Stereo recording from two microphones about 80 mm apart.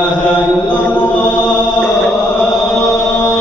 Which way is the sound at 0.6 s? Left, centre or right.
Centre.